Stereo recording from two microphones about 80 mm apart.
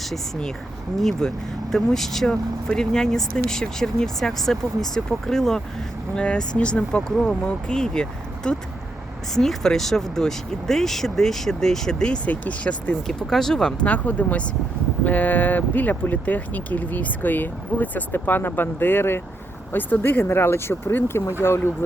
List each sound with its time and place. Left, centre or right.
0.0 s speech: centre
13.8 s speech: centre